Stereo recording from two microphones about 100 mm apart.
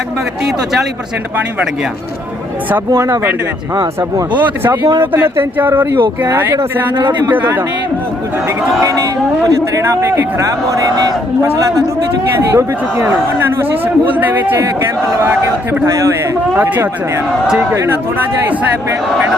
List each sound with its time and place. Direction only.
0.4 s a man's voice: 5° right (ahead or behind)
2.9 s speech: 30° right (ahead or behind)
4.4 s speech: 20° right (ahead or behind)
4.8 s speech: 45° right (ahead or behind)
5.1 s speech: 20° right (ahead or behind)
6.9 s speech: 55° right (ahead or behind)
7.3 s speech: 20° right (ahead or behind)
9.5 s speech: 35° right (ahead or behind)
12.4 s speech: 30° right (ahead or behind)
14.1 s a man's voice: 15° right (ahead or behind)
16.6 s a man's voice: 15° right (ahead or behind)